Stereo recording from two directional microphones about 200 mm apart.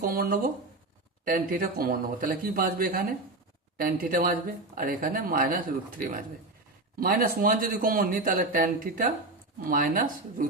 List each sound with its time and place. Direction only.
0.0 s speech: 45° right (ahead or behind)